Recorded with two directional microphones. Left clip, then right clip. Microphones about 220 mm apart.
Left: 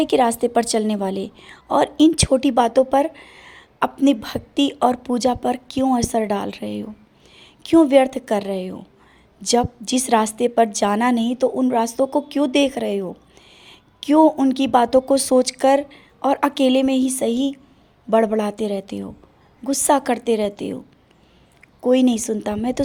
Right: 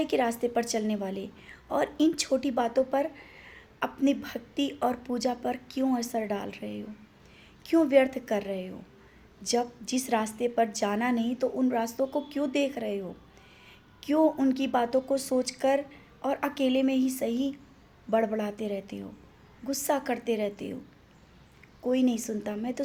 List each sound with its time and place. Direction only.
0.0 s a woman's voice: 35° left (ahead or behind)